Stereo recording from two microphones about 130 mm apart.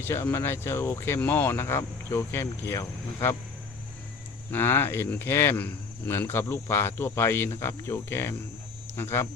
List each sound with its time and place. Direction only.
0.0 s speech: 20° left (ahead or behind)
4.5 s speech: 15° left (ahead or behind)